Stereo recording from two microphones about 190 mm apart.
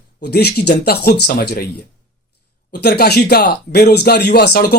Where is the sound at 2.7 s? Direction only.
55° left (ahead or behind).